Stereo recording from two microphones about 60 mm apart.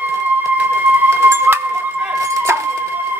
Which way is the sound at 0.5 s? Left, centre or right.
Right.